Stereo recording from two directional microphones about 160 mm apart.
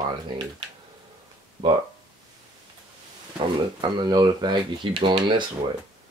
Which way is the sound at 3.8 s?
30° right (ahead or behind).